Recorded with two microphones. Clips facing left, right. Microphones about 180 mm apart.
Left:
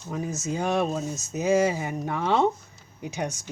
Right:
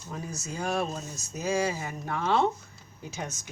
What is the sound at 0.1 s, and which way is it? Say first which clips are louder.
Speech: left 8 dB; 20° left (ahead or behind).